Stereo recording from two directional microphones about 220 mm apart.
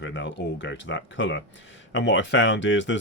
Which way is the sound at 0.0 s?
60° left (ahead or behind).